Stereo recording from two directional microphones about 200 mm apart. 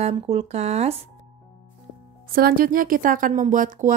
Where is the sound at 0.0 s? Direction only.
30° right (ahead or behind).